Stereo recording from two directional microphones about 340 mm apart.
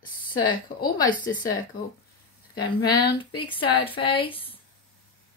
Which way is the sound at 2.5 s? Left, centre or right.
Centre.